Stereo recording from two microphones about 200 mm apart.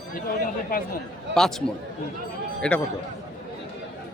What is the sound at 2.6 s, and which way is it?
Speech, 5° left (ahead or behind).